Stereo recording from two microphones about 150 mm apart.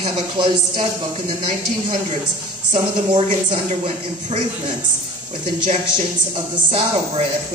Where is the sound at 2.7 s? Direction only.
45° right (ahead or behind).